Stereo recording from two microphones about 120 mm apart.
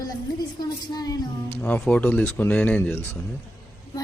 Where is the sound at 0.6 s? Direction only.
35° left (ahead or behind).